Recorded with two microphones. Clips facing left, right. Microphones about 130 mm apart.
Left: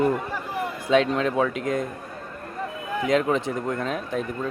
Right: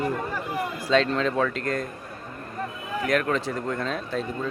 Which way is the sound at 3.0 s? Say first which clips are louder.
Left 2 dB; 20° left (ahead or behind).